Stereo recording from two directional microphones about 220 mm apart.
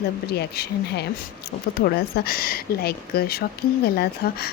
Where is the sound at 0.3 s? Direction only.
45° left (ahead or behind).